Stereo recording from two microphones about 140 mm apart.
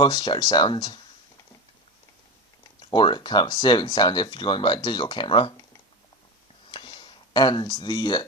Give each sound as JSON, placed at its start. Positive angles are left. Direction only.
{"t": 0.0, "sound": "speech", "side_deg": 35}
{"t": 2.9, "sound": "speech", "side_deg": 30}
{"t": 6.7, "sound": "a sound", "side_deg": 35}